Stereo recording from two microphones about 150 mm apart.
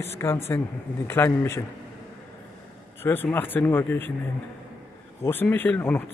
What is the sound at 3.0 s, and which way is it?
Speech, 15° left (ahead or behind).